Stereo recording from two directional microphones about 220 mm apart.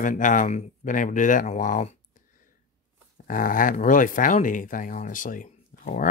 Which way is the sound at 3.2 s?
40° left (ahead or behind).